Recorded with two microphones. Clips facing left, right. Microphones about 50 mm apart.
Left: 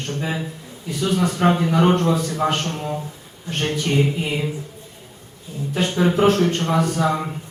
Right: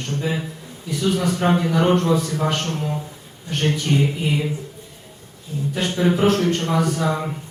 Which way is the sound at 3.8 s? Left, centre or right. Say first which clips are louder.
Even; left.